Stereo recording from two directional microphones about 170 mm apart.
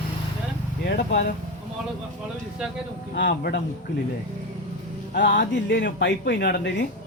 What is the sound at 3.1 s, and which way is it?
Speech, 90° left.